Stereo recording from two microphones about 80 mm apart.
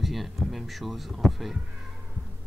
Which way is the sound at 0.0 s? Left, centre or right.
Centre.